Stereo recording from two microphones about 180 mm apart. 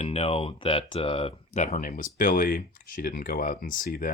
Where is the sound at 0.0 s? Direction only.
35° left (ahead or behind).